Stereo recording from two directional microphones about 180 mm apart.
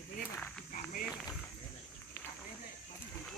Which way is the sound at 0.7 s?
50° left (ahead or behind).